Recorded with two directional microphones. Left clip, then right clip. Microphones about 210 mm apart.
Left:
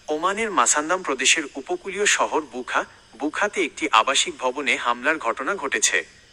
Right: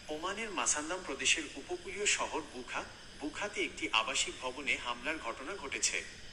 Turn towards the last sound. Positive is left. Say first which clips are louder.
# left 14 dB
turn(degrees=40)  # may be behind; listen again after turning